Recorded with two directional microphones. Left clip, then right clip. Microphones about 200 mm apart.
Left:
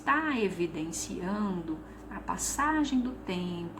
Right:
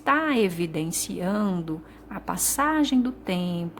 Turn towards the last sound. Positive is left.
turn(degrees=-55)  # may be behind; listen again after turning